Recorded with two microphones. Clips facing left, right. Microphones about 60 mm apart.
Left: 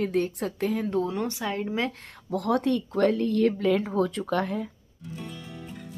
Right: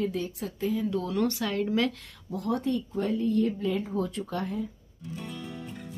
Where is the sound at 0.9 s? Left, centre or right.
Left.